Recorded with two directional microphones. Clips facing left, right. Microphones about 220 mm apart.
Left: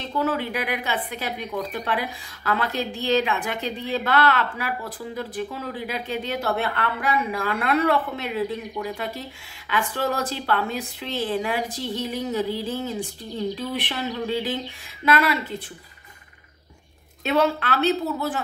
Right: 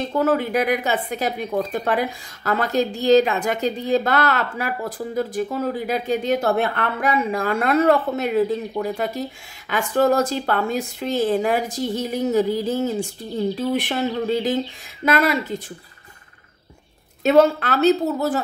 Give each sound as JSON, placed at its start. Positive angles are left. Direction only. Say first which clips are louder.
{"t": 0.0, "sound": "a woman's voice", "louder": "right 5 dB", "side_deg": -45}
{"t": 17.2, "sound": "a woman's voice", "louder": "right 7 dB", "side_deg": -45}